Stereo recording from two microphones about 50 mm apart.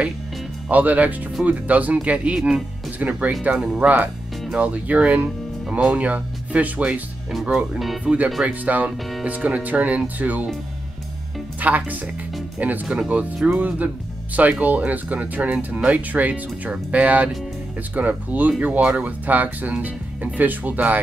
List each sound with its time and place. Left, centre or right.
0.7 s speech: right
3.0 s speech: right
7.3 s speech: centre
8.0 s speech: right
11.6 s speech: right